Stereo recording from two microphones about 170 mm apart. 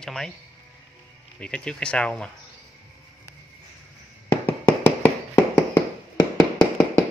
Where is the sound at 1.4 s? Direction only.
5° left (ahead or behind).